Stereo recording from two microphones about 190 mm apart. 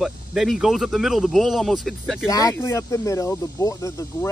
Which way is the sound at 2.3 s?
20° left (ahead or behind).